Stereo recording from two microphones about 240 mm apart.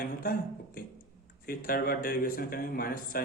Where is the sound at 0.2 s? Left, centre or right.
Left.